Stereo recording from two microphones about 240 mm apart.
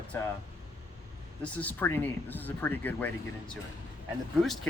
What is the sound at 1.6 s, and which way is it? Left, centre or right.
Speech, centre.